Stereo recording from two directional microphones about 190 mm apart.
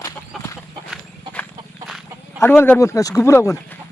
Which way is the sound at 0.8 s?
5° left (ahead or behind).